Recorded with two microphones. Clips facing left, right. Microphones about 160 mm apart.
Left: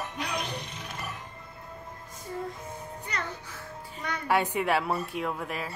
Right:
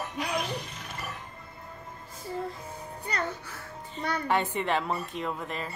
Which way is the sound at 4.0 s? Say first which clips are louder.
Right 4 dB; 35° right (ahead or behind).